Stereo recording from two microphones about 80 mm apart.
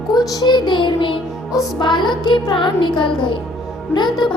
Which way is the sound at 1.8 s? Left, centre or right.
Left.